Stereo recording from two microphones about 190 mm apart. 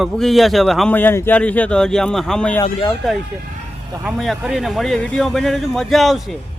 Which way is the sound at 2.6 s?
20° left (ahead or behind).